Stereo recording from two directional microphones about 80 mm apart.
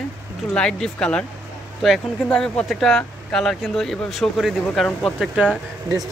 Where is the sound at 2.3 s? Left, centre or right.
Centre.